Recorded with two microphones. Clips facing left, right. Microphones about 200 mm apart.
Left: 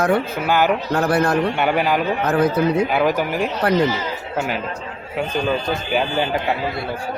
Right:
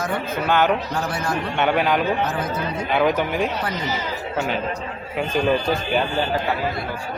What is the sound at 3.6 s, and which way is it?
Speech, 65° left (ahead or behind).